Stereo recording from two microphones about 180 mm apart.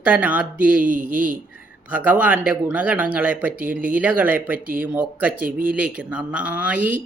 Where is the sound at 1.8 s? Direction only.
10° right (ahead or behind).